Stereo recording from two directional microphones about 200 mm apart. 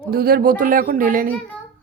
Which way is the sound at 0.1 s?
50° right (ahead or behind).